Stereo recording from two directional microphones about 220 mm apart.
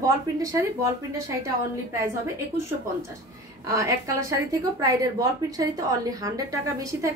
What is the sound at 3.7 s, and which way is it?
A woman's voice, 15° right (ahead or behind).